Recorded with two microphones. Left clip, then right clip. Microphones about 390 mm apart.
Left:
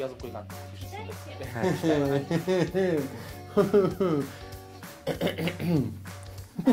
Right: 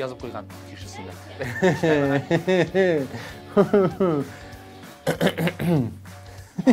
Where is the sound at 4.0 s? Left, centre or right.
Right.